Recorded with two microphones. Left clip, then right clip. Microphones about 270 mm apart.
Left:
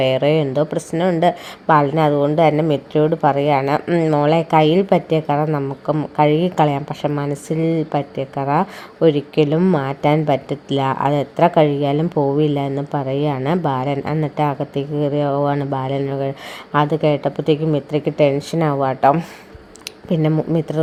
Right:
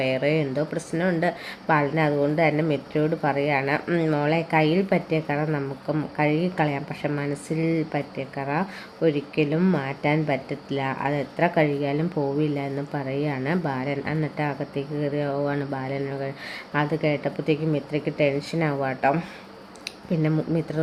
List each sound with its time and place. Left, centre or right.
0.0 s a woman's voice: left